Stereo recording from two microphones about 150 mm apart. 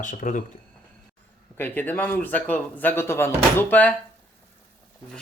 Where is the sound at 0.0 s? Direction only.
60° left (ahead or behind).